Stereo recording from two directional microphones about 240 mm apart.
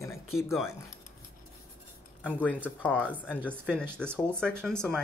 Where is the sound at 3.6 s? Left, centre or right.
Centre.